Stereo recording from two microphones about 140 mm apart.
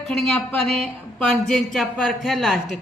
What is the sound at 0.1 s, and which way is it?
A woman's voice, 5° left (ahead or behind).